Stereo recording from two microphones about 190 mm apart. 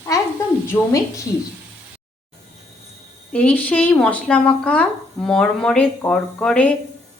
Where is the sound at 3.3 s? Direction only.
10° left (ahead or behind).